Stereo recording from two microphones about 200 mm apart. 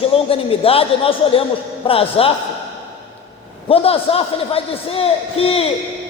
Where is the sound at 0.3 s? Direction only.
30° left (ahead or behind).